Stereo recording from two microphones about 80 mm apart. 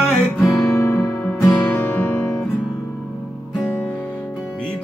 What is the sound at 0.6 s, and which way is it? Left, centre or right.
Guitar, left.